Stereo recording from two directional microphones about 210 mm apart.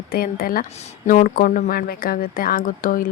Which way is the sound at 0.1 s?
45° left (ahead or behind).